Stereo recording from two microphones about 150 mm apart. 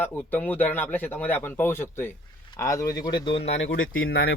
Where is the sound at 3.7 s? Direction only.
90° left.